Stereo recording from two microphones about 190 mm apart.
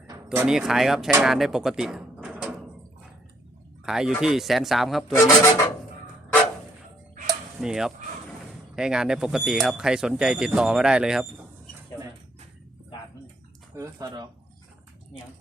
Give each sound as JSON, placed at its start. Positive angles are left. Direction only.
{"t": 0.3, "sound": "speech", "side_deg": -5}
{"t": 3.8, "sound": "speech", "side_deg": -5}
{"t": 5.1, "sound": "speech", "side_deg": 15}
{"t": 7.6, "sound": "speech", "side_deg": -5}
{"t": 13.7, "sound": "speech", "side_deg": -20}